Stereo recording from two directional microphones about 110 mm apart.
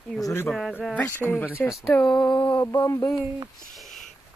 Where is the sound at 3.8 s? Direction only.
Centre (ahead or behind).